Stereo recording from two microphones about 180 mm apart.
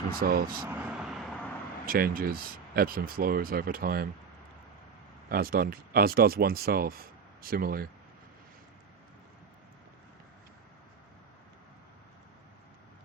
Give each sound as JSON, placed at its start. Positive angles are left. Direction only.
{"t": 0.2, "sound": "speech", "side_deg": -55}
{"t": 0.7, "sound": "vehicle", "side_deg": -5}
{"t": 1.9, "sound": "speech", "side_deg": -55}
{"t": 5.3, "sound": "speech", "side_deg": -55}